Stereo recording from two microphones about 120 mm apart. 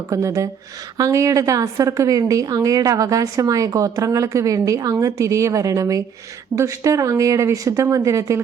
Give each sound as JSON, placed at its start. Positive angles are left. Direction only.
{"t": 0.1, "sound": "a woman's voice", "side_deg": -25}